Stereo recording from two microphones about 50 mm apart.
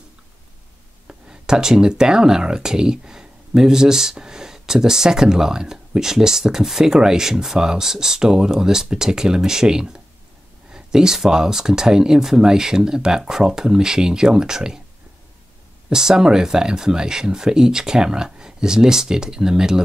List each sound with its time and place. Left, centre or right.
1.0 s speech: centre
15.9 s speech: centre